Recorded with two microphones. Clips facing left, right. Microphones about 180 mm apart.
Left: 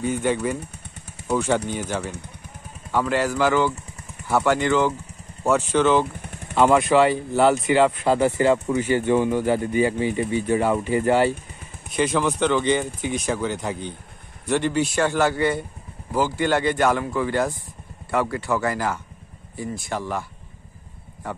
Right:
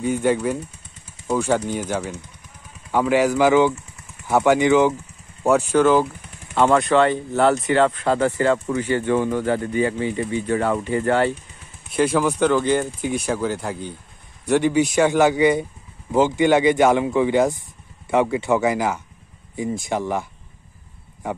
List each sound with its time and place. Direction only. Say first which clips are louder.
0.0 s speech: right 3 dB; 10° right (ahead or behind)
6.5 s speech: even; 5° left (ahead or behind)
7.9 s speech: even; 15° left (ahead or behind)
11.9 s speech: right 3 dB; 5° right (ahead or behind)